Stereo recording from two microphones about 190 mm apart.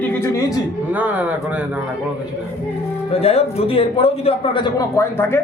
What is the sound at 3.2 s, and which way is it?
A man's voice, 30° left (ahead or behind).